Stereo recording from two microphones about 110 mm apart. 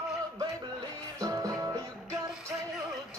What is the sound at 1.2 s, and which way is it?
Music, 30° right (ahead or behind).